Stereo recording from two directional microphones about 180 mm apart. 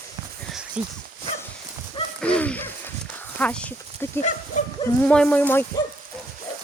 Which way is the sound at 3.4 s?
5° left (ahead or behind).